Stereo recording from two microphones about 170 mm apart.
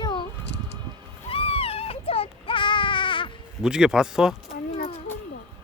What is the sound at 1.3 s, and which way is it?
Baby cry, 35° left (ahead or behind).